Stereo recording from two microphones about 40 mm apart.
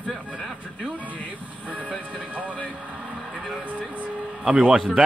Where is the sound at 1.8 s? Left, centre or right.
Left.